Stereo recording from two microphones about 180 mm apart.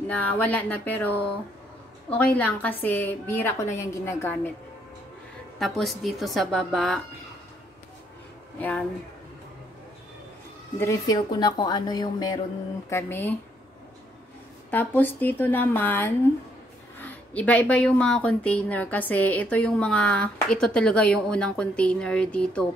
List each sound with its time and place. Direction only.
0.1 s a woman's voice: 10° left (ahead or behind)
5.6 s a woman's voice: centre (ahead or behind)
8.5 s a woman's voice: 10° left (ahead or behind)
10.8 s a woman's voice: 20° left (ahead or behind)
12.9 s a woman's voice: 10° left (ahead or behind)
14.7 s a woman's voice: 10° left (ahead or behind)